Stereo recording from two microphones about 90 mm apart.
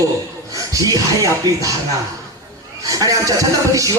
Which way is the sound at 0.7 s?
40° right (ahead or behind).